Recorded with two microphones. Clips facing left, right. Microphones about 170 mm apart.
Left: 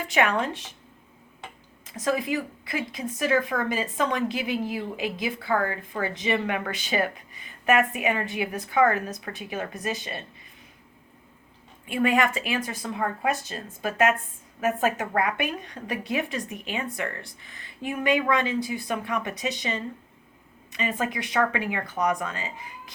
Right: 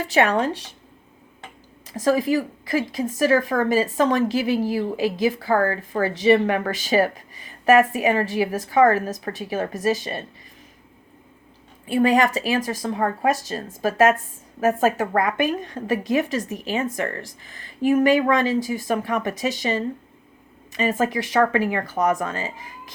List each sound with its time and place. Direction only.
0.0 s a woman's voice: 35° right (ahead or behind)
2.0 s a woman's voice: 40° right (ahead or behind)
11.9 s a woman's voice: 35° right (ahead or behind)